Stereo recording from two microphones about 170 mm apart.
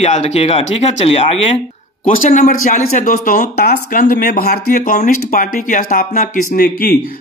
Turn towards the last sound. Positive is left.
turn(degrees=65)  # may be behind; listen again after turning